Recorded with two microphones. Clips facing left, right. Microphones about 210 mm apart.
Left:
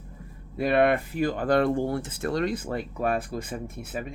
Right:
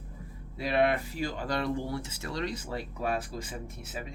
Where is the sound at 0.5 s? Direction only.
55° left (ahead or behind).